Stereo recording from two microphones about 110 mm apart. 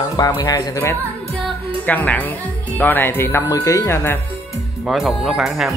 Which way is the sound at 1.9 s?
15° left (ahead or behind).